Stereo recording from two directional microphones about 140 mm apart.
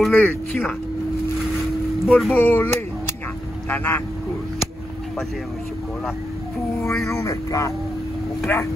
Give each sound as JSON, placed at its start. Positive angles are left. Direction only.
{"t": 0.0, "sound": "speech", "side_deg": 5}
{"t": 2.0, "sound": "speech", "side_deg": 0}
{"t": 2.3, "sound": "speech", "side_deg": 10}
{"t": 6.8, "sound": "speech", "side_deg": 5}
{"t": 7.1, "sound": "speech", "side_deg": 20}